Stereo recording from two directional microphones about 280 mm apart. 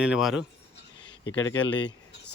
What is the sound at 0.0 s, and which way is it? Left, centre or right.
Speech, centre.